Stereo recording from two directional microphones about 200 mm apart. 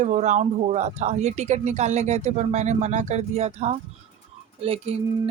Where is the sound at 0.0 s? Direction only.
35° right (ahead or behind).